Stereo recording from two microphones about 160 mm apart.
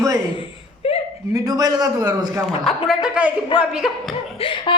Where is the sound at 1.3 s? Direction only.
25° right (ahead or behind).